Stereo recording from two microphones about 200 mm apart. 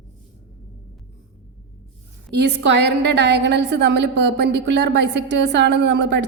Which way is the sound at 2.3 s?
60° right (ahead or behind).